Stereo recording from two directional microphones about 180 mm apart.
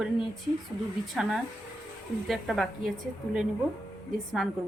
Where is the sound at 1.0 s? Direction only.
Centre (ahead or behind).